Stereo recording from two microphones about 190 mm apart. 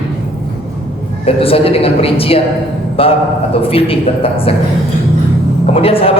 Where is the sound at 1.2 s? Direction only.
30° left (ahead or behind).